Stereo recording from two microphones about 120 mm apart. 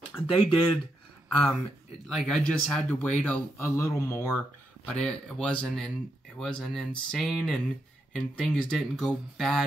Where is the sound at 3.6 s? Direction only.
25° left (ahead or behind).